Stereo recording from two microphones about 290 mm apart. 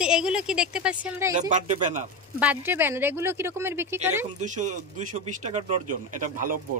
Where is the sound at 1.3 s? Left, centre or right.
Right.